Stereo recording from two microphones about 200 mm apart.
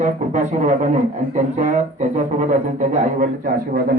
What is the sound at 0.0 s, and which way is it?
A man's voice, 40° right (ahead or behind).